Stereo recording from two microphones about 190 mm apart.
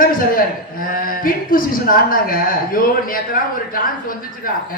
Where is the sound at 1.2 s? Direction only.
45° left (ahead or behind).